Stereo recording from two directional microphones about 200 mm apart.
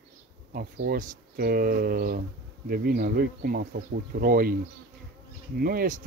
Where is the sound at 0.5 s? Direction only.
50° right (ahead or behind).